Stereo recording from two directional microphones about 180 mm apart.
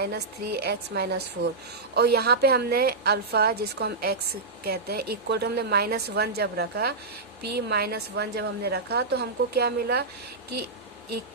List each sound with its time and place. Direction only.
0.0 s a woman's voice: 60° right (ahead or behind)